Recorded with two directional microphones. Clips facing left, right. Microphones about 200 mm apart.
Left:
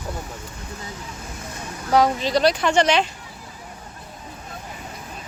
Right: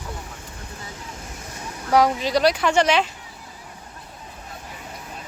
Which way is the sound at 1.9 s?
10° right (ahead or behind).